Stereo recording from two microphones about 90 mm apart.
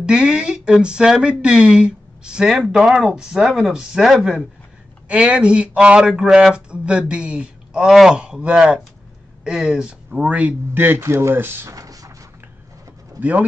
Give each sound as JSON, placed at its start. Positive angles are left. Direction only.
{"t": 0.0, "sound": "speech", "side_deg": -10}
{"t": 11.7, "sound": "a sound", "side_deg": -40}
{"t": 13.2, "sound": "speech", "side_deg": -15}